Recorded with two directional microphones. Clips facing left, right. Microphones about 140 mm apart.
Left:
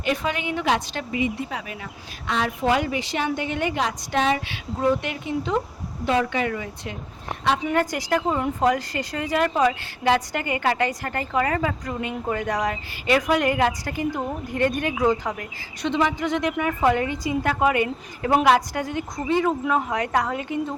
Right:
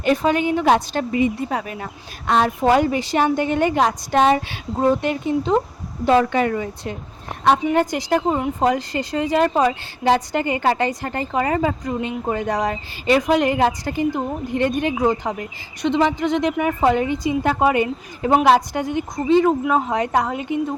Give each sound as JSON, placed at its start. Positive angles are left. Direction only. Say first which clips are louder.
{"t": 0.0, "sound": "a woman's voice", "louder": "right 7 dB", "side_deg": -40}
{"t": 7.7, "sound": "a woman's voice", "louder": "right 4 dB", "side_deg": -20}